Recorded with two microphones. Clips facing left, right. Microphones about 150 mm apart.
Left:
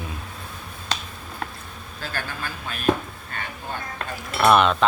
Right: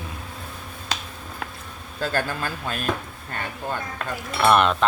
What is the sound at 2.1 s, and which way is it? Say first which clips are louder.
Speech: right 4 dB; 45° right (ahead or behind).